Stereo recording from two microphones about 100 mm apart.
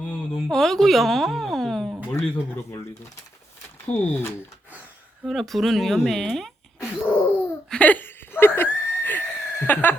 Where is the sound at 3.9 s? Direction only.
10° left (ahead or behind).